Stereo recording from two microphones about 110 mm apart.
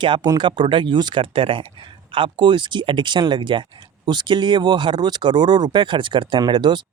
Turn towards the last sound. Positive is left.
turn(degrees=-45)  # may be behind; listen again after turning